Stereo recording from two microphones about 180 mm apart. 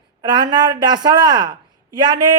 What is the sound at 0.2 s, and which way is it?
Speech, 25° right (ahead or behind).